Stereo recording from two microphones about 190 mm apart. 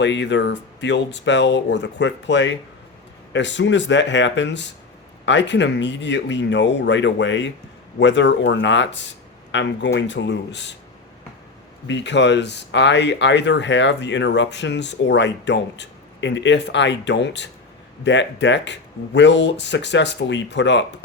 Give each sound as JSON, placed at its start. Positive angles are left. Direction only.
{"t": 0.0, "sound": "speech", "side_deg": 70}
{"t": 11.9, "sound": "speech", "side_deg": 70}